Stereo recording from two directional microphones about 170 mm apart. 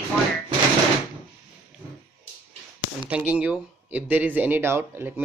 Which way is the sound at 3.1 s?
5° right (ahead or behind).